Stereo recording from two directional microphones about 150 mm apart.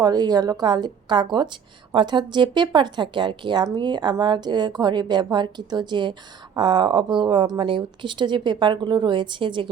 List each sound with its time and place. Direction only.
0.0 s a woman's voice: 25° right (ahead or behind)